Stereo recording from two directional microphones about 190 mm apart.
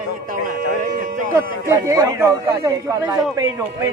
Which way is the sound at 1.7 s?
15° right (ahead or behind).